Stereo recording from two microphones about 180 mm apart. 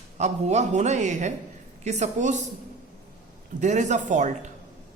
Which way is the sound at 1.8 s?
40° right (ahead or behind).